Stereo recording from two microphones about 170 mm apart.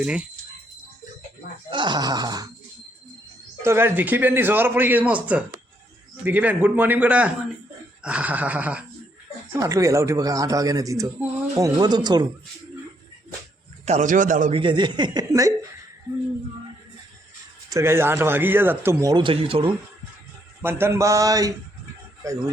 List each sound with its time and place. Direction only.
0.0 s a man's voice: 5° right (ahead or behind)
1.7 s speech: 25° right (ahead or behind)
3.6 s a man's voice: 15° right (ahead or behind)
13.8 s a man's voice: 45° right (ahead or behind)
14.5 s speech: 30° right (ahead or behind)
17.7 s a man's voice: 15° right (ahead or behind)
19.1 s speech: 30° right (ahead or behind)
20.6 s a man's voice: 15° right (ahead or behind)